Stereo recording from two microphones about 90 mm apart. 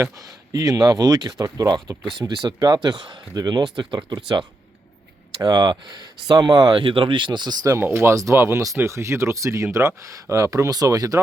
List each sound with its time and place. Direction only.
0.0 s speech: 40° right (ahead or behind)
6.8 s speech: 70° right (ahead or behind); by 7.8 s 45° right (ahead or behind)
7.8 s speech: 25° right (ahead or behind)